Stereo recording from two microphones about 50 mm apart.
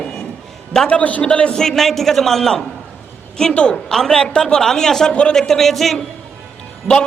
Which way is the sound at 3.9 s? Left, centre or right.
Centre.